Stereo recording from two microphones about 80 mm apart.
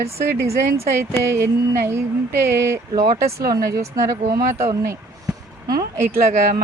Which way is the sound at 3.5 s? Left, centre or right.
Right.